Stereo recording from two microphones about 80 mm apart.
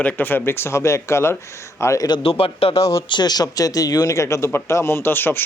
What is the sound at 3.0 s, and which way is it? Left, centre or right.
A man's voice, left.